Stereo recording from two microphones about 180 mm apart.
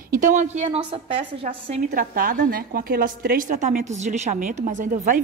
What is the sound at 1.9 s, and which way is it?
A woman's voice, 55° right (ahead or behind).